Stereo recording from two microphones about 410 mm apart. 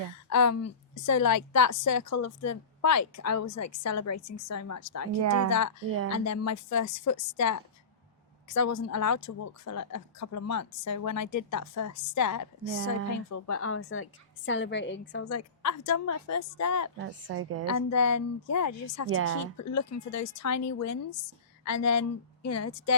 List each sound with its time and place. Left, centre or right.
0.3 s a woman's voice: left
5.2 s a woman's voice: right
5.5 s a woman's voice: left
13.3 s a woman's voice: left
17.0 s a woman's voice: right
17.7 s a woman's voice: left
19.1 s a woman's voice: right
19.5 s a woman's voice: left